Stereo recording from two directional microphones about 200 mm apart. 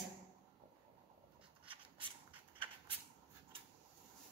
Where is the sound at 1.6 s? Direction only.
25° right (ahead or behind).